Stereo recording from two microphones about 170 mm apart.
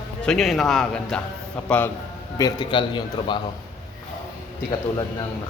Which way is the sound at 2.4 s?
25° left (ahead or behind).